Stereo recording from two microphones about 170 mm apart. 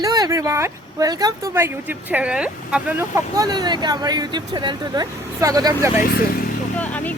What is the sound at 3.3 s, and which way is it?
Speech, 25° right (ahead or behind).